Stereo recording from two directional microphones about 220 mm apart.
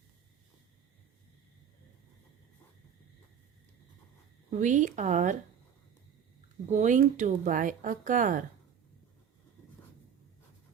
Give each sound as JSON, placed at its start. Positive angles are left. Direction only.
{"t": 4.5, "sound": "speech", "side_deg": -35}
{"t": 6.7, "sound": "speech", "side_deg": -35}